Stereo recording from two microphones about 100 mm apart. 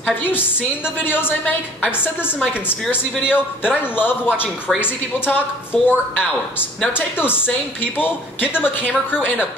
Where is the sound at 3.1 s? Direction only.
10° right (ahead or behind).